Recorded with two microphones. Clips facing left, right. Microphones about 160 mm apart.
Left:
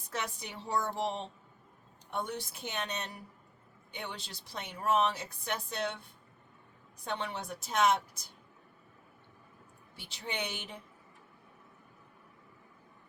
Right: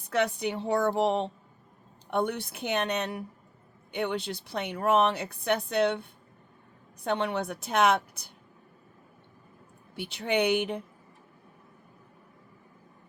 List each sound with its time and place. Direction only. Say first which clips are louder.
0.1 s a woman's voice: right 12 dB; 65° right (ahead or behind)
9.9 s a woman's voice: right 12 dB; 65° right (ahead or behind)